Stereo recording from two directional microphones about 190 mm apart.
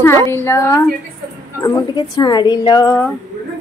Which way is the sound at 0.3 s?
10° left (ahead or behind).